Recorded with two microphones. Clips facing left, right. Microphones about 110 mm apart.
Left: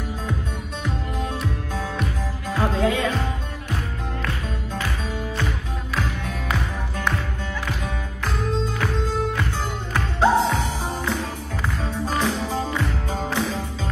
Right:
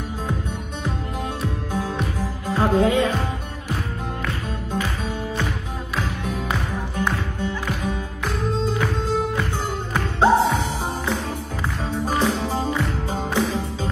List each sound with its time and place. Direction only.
2.4 s music: 15° right (ahead or behind)
7.0 s music: 15° right (ahead or behind)
10.2 s music: 15° right (ahead or behind)